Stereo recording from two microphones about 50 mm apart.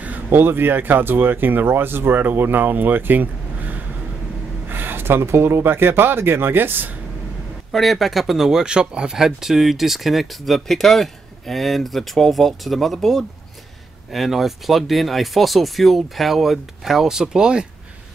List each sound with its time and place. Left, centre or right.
0.0 s a sound: right
0.4 s speech: right
4.6 s speech: right
7.7 s speech: centre